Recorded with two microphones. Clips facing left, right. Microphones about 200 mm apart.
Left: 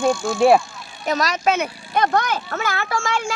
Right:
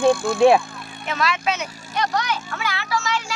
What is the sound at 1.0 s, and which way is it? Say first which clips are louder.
Speech: left 3 dB; 40° left (ahead or behind).